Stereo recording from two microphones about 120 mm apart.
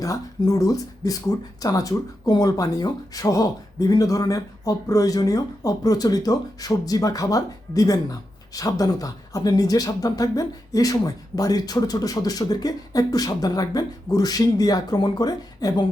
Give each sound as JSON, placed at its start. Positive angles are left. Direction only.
{"t": 0.0, "sound": "speech", "side_deg": 30}